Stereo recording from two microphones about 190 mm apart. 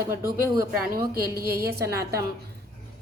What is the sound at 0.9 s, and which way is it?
Speech, 50° right (ahead or behind).